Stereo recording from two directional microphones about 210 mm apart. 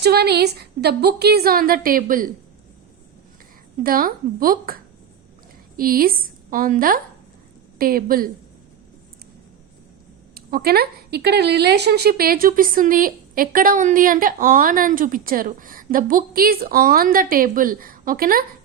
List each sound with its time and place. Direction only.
0.0 s speech: 50° right (ahead or behind)
3.8 s a woman's voice: 45° right (ahead or behind)
10.3 s speech: 45° right (ahead or behind)